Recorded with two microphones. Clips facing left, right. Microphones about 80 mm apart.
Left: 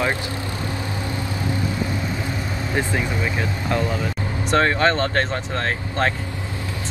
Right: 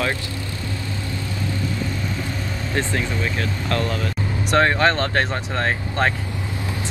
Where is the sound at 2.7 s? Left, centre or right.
Centre.